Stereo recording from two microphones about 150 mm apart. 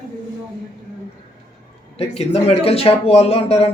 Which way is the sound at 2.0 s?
45° left (ahead or behind).